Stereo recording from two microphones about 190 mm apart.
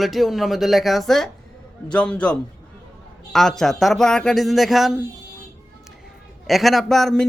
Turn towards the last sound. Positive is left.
turn(degrees=0)  # may be behind; listen again after turning